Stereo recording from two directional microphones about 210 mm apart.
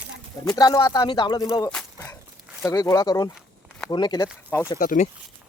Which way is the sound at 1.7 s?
10° left (ahead or behind).